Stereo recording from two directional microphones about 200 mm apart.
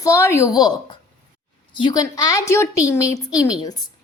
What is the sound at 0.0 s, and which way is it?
A woman's voice, 15° left (ahead or behind).